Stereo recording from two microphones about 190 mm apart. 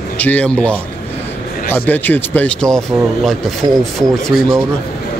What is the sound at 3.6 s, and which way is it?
Speech, 20° right (ahead or behind).